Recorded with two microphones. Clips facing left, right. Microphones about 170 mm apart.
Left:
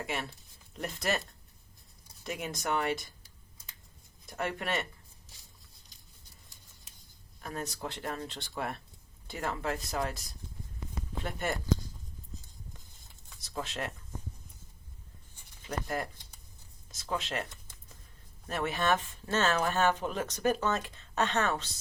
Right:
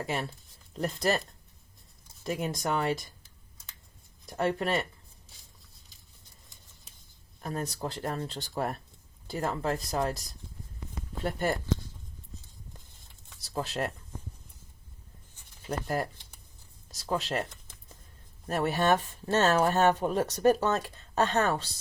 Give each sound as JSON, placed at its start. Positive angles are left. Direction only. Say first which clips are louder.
{"t": 0.0, "sound": "a woman's voice", "louder": "right 4 dB", "side_deg": -35}
{"t": 2.2, "sound": "a woman's voice", "louder": "right 4 dB", "side_deg": -35}
{"t": 4.4, "sound": "a woman's voice", "louder": "right 5 dB", "side_deg": -30}
{"t": 7.4, "sound": "a woman's voice", "louder": "right 4 dB", "side_deg": -40}
{"t": 13.4, "sound": "speech", "louder": "right 5 dB", "side_deg": -35}
{"t": 15.6, "sound": "a woman's voice", "louder": "right 4 dB", "side_deg": -40}